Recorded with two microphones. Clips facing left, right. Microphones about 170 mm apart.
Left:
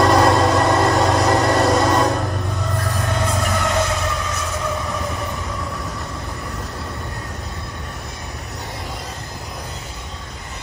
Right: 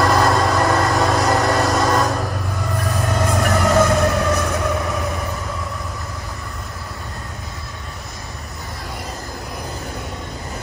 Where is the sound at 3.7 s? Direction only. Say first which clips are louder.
Right 7 dB; 45° right (ahead or behind).